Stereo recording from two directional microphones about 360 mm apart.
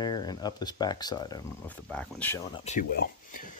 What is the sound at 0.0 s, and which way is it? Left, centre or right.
Speech, centre.